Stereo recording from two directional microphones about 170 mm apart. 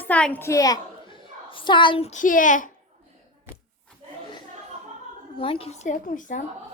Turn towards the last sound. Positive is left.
turn(degrees=50)  # may be behind; listen again after turning